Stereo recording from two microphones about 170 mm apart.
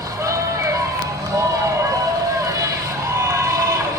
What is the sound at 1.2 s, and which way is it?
Run, 20° right (ahead or behind).